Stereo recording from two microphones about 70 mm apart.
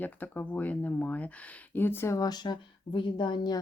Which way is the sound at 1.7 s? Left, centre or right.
Left.